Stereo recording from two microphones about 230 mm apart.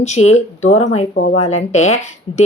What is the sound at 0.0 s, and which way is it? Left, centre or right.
A woman's voice, left.